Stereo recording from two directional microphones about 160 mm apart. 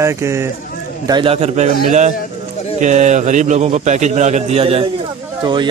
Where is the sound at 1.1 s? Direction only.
35° right (ahead or behind).